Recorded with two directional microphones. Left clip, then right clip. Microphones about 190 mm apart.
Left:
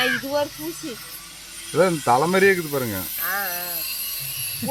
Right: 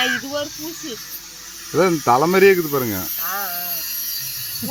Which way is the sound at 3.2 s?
40° left (ahead or behind).